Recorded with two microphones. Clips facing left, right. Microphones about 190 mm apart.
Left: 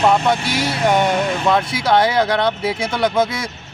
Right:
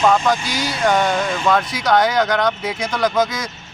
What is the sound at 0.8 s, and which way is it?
Speech, 25° left (ahead or behind).